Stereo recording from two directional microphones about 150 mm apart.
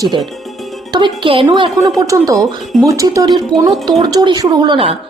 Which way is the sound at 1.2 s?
35° right (ahead or behind).